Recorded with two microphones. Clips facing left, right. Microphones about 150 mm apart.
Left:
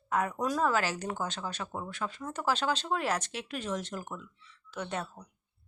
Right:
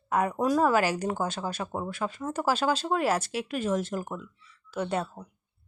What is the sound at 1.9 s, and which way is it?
Speech, 10° right (ahead or behind).